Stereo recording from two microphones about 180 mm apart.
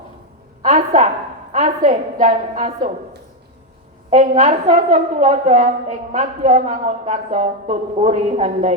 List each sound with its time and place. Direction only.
0.6 s a woman's voice: 40° right (ahead or behind)
4.1 s a woman's voice: 40° right (ahead or behind)